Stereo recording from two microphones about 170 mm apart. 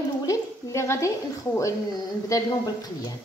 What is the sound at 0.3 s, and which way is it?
A woman's voice, 15° left (ahead or behind).